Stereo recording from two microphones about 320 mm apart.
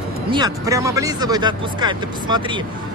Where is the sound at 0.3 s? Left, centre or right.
Centre.